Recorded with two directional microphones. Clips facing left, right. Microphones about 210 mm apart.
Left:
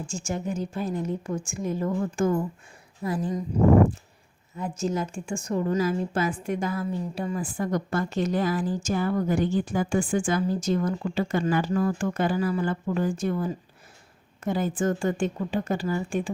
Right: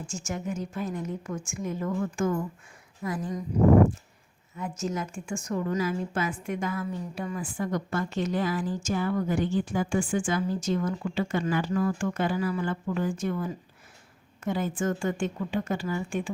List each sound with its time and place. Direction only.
0.1 s a woman's voice: 30° left (ahead or behind)
4.5 s a woman's voice: 30° left (ahead or behind)